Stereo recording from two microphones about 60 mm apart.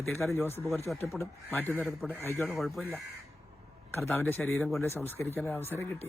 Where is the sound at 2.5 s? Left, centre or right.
Centre.